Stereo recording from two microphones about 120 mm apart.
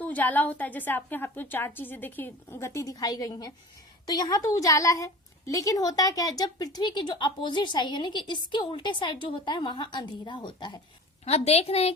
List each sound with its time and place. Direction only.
0.0 s a woman's voice: 15° left (ahead or behind); by 10.8 s 40° left (ahead or behind)
11.3 s a woman's voice: 60° left (ahead or behind)